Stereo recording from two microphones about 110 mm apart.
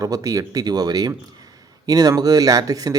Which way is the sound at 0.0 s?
35° right (ahead or behind).